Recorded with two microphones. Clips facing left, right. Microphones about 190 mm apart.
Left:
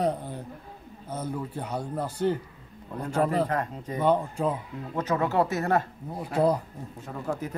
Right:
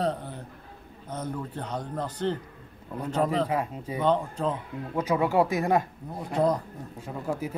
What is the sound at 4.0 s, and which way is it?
Speech, 10° left (ahead or behind).